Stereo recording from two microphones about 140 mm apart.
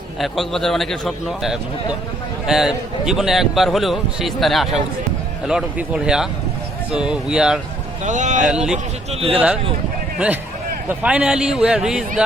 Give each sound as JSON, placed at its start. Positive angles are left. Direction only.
{"t": 0.2, "sound": "a man's voice", "side_deg": 0}
{"t": 8.0, "sound": "speech", "side_deg": -60}
{"t": 8.4, "sound": "a man's voice", "side_deg": -5}
{"t": 10.8, "sound": "a man's voice", "side_deg": -10}